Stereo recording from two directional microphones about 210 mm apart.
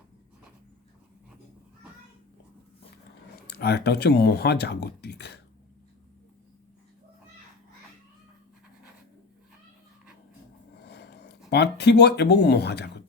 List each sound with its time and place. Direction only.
3.6 s speech: 50° left (ahead or behind)
10.8 s speech: 50° left (ahead or behind)